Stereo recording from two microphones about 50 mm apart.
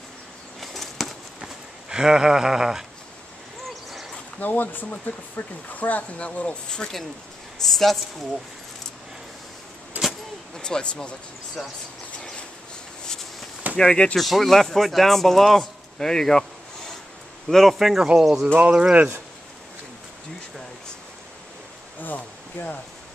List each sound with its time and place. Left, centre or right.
0.6 s a sound: centre
1.4 s a sound: centre
3.6 s a sound: centre
4.4 s speech: left; by 8.0 s centre
9.9 s vehicle: right
10.6 s speech: centre
12.2 s a sound: centre
13.7 s speech: centre
14.1 s speech: centre
17.5 s speech: centre
17.7 s speech: centre
18.6 s speech: right
22.0 s speech: left